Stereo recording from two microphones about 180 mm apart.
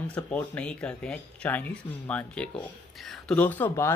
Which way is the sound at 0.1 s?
5° left (ahead or behind).